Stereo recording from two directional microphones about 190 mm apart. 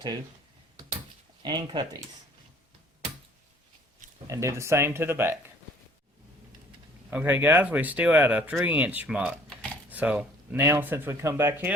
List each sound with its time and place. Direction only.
1.4 s speech: 20° right (ahead or behind)
4.3 s speech: 15° right (ahead or behind)
7.1 s speech: 10° right (ahead or behind)